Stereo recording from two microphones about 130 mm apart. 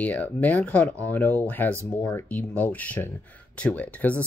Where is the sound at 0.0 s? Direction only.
10° left (ahead or behind).